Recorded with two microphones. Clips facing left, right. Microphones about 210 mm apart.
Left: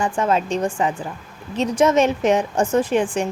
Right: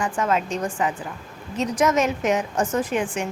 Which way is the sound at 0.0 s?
30° left (ahead or behind).